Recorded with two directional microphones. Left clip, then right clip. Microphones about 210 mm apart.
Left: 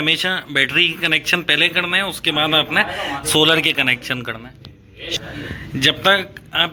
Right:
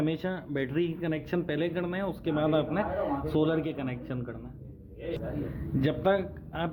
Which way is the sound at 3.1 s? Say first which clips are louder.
Left 13 dB; 10° left (ahead or behind).